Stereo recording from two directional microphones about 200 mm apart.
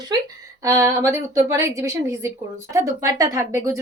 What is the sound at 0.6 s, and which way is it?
A woman's voice, 15° right (ahead or behind).